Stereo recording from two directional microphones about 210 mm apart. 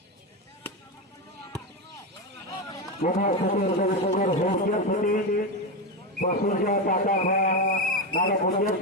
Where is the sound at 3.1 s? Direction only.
40° left (ahead or behind).